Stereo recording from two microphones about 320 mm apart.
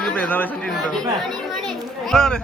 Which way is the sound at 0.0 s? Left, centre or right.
Centre.